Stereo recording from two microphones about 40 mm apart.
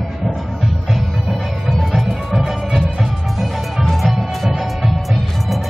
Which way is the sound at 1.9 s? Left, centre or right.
Centre.